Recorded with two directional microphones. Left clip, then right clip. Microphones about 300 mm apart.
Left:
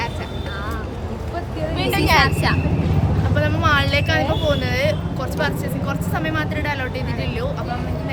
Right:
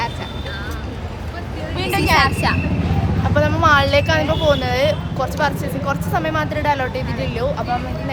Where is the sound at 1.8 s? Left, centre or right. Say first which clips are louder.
Right 1 dB; centre.